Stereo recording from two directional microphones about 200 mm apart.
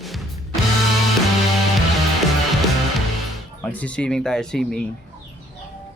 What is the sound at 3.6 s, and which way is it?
Speech, 5° left (ahead or behind).